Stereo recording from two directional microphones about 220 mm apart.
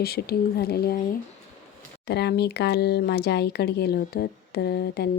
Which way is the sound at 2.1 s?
50° left (ahead or behind).